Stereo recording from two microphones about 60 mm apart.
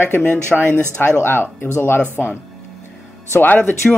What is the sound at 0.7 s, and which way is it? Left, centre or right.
Speech, right.